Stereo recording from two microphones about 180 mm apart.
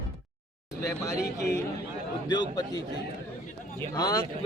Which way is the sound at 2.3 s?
20° left (ahead or behind).